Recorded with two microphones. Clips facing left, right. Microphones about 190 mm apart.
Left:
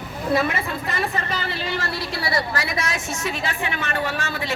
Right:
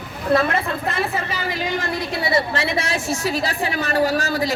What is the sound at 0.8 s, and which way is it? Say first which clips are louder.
A woman's voice: right 2 dB; 5° right (ahead or behind).